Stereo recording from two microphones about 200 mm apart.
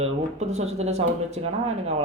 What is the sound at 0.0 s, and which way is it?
Speech, 35° right (ahead or behind).